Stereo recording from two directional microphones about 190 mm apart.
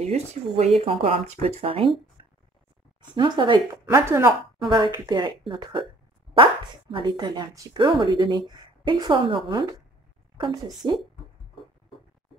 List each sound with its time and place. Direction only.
0.0 s speech: 35° right (ahead or behind)
2.2 s a sound: 25° right (ahead or behind)
3.2 s speech: 25° right (ahead or behind)
10.3 s a woman's voice: 25° right (ahead or behind)